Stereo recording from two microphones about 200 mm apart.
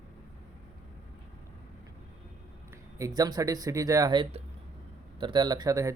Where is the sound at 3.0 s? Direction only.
15° right (ahead or behind).